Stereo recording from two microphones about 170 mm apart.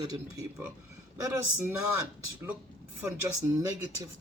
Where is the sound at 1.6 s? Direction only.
10° right (ahead or behind).